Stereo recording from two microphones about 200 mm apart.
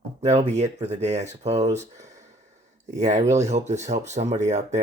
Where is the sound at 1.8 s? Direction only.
35° right (ahead or behind).